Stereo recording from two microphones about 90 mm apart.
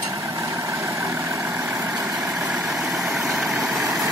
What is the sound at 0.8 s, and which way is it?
Vehicle, 35° right (ahead or behind).